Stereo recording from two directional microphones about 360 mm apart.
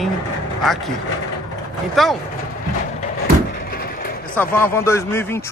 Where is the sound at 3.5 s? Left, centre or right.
Left.